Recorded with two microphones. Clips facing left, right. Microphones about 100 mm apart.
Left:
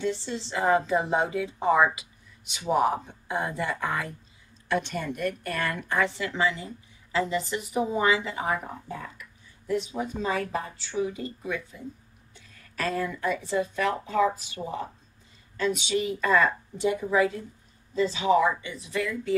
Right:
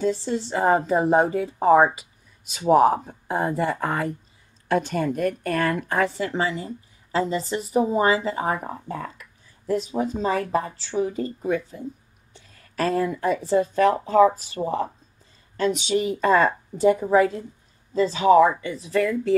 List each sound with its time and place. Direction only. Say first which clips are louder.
0.0 s a woman's voice: right 6 dB; 40° right (ahead or behind)